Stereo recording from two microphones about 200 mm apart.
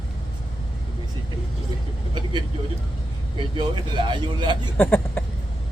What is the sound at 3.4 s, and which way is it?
Speech, 25° right (ahead or behind).